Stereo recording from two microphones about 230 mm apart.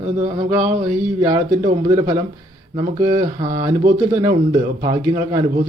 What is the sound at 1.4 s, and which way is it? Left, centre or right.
Speech, centre.